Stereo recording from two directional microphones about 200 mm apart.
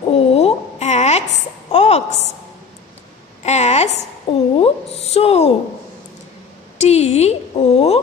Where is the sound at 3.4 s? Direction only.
35° left (ahead or behind).